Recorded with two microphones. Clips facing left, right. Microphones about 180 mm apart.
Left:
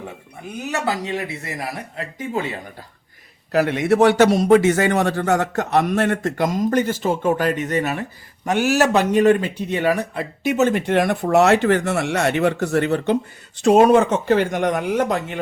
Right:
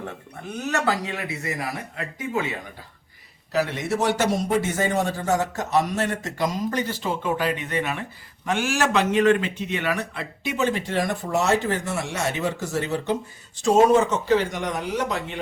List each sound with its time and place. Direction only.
0.6 s speech: 15° left (ahead or behind)
3.5 s speech: 55° left (ahead or behind)